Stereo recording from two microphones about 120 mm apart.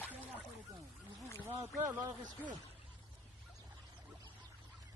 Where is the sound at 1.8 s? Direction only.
25° right (ahead or behind).